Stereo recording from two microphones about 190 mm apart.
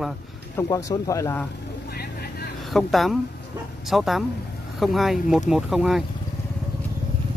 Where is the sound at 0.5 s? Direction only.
20° left (ahead or behind).